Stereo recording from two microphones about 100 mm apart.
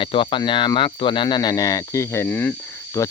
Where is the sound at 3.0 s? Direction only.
30° left (ahead or behind).